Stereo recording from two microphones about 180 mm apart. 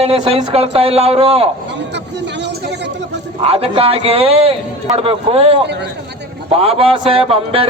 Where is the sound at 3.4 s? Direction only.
35° right (ahead or behind).